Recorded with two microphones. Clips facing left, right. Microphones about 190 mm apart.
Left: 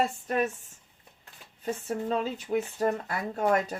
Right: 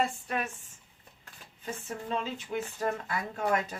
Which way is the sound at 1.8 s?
40° left (ahead or behind).